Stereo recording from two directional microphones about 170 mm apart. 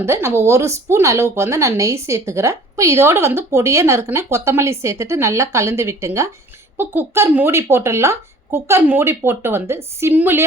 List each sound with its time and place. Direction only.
0.0 s speech: 15° right (ahead or behind)